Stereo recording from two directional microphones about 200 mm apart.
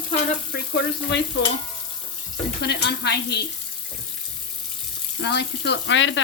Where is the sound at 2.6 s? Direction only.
55° left (ahead or behind).